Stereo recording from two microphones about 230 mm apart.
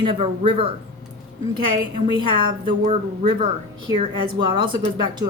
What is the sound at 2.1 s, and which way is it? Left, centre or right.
Speech, right.